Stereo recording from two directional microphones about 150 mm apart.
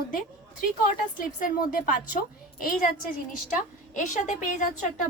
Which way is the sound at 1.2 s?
65° left (ahead or behind).